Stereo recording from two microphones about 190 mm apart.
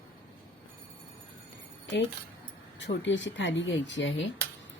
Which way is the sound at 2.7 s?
70° left (ahead or behind).